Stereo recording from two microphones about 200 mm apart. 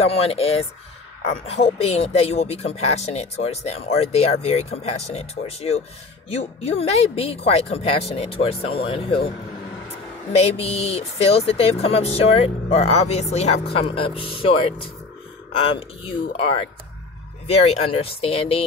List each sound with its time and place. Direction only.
0.1 s speech: 30° left (ahead or behind)
10.3 s speech: 30° left (ahead or behind)
17.5 s speech: 30° left (ahead or behind)